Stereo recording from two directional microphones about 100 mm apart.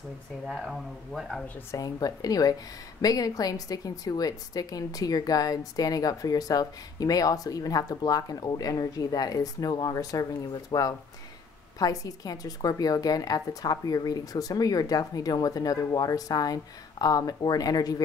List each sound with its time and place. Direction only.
0.5 s speech: 5° right (ahead or behind)
1.7 s a woman's voice: 35° left (ahead or behind)